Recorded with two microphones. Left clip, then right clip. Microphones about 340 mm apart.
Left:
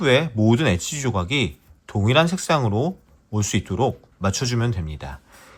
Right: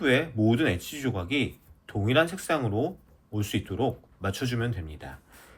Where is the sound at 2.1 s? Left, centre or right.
Centre.